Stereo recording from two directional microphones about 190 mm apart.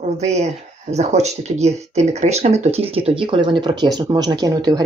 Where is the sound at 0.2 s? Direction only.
35° right (ahead or behind).